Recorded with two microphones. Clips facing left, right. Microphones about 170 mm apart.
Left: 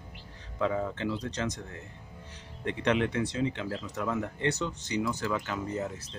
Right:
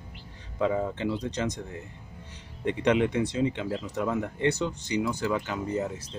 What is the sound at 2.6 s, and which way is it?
Speech, 15° right (ahead or behind).